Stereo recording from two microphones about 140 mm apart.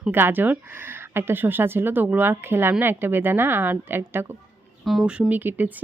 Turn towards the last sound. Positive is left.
turn(degrees=-15)  # may be behind; listen again after turning